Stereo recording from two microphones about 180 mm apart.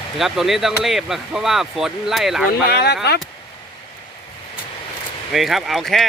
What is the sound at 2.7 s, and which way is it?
Speech, 65° left (ahead or behind).